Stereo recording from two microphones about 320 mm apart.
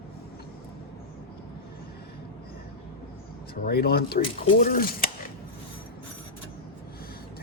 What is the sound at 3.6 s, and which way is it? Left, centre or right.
Speech, left.